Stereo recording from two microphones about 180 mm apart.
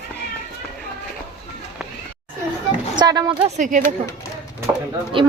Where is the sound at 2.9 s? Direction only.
20° right (ahead or behind).